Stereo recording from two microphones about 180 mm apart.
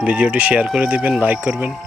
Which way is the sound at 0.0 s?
5° right (ahead or behind).